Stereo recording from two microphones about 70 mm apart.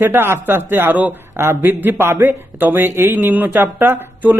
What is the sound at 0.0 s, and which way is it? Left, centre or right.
Speech, right.